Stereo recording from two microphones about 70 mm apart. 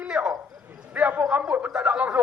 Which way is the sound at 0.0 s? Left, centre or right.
Centre.